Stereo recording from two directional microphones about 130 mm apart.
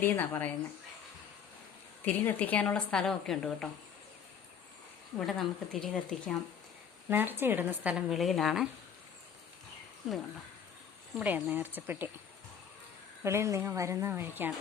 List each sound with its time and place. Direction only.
0.0 s a woman's voice: 15° left (ahead or behind)
2.0 s a woman's voice: 15° left (ahead or behind)
5.2 s a woman's voice: centre (ahead or behind)
7.1 s a woman's voice: 15° right (ahead or behind); by 8.6 s centre (ahead or behind)
11.2 s a woman's voice: 10° right (ahead or behind)
13.2 s speech: 20° right (ahead or behind)